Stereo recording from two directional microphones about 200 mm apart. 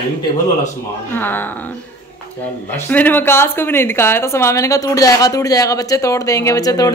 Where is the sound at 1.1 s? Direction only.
10° left (ahead or behind).